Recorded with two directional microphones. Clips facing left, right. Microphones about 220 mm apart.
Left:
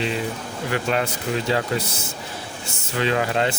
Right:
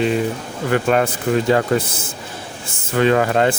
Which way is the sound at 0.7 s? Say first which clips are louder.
Right 7 dB; 50° right (ahead or behind).